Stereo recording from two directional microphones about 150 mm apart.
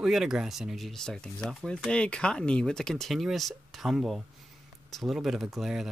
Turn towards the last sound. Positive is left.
turn(degrees=0)  # may be behind; listen again after turning